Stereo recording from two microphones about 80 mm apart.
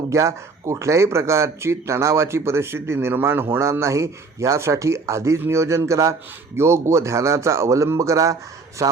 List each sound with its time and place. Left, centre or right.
0.1 s a man's voice: right